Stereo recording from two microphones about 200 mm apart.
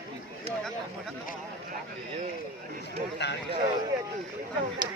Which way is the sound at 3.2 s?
60° left (ahead or behind).